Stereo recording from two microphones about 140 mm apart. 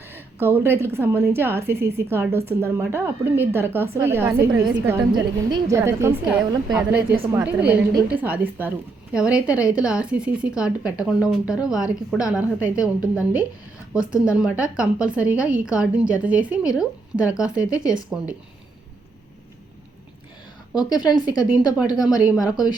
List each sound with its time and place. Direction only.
0.1 s a woman's voice: 15° right (ahead or behind)
5.1 s a woman's voice: 30° right (ahead or behind)
5.7 s a woman's voice: 20° right (ahead or behind)
20.7 s a woman's voice: 30° left (ahead or behind)
21.3 s a woman's voice: 10° right (ahead or behind)